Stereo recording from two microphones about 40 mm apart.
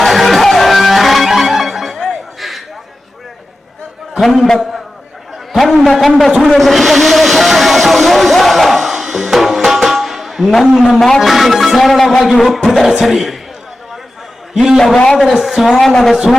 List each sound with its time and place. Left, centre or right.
0.0 s music: centre
4.2 s music: centre
4.4 s a man's voice: centre
6.5 s vehicle: centre
11.0 s music: centre
14.5 s a man's voice: centre
14.9 s a man's voice: centre
15.4 s music: centre
15.9 s a man's voice: centre